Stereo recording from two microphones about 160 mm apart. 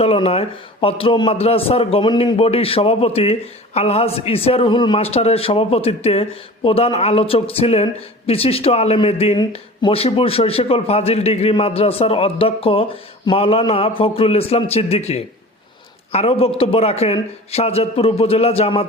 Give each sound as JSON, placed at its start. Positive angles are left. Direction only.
{"t": 0.0, "sound": "a man's voice", "side_deg": 40}